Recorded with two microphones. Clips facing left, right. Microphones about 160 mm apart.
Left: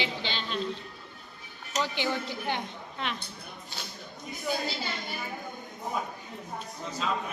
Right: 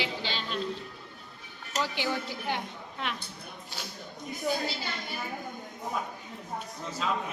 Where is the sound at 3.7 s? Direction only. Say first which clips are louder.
Right 1 dB; 10° right (ahead or behind).